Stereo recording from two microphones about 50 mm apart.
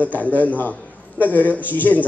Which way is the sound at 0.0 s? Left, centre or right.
Left.